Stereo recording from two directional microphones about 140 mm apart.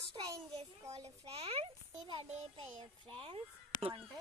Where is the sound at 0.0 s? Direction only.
40° right (ahead or behind).